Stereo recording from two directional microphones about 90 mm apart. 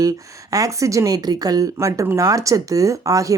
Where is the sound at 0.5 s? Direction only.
40° right (ahead or behind).